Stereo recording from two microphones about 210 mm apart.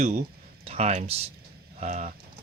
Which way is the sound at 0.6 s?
30° right (ahead or behind).